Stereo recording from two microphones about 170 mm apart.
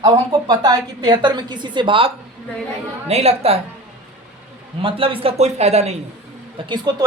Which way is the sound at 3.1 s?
35° right (ahead or behind).